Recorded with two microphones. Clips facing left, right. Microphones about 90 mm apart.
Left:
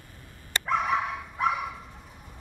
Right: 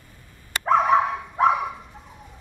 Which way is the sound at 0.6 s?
35° right (ahead or behind).